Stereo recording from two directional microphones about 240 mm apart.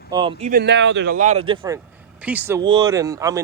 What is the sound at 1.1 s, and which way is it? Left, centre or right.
Speech, right.